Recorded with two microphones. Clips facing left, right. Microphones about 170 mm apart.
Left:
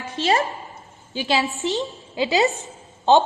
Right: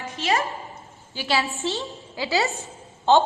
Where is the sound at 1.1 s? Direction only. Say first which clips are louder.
Left 3 dB; 20° left (ahead or behind).